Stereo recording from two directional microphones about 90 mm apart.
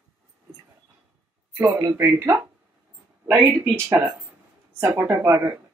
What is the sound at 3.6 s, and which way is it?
Speech, 20° right (ahead or behind).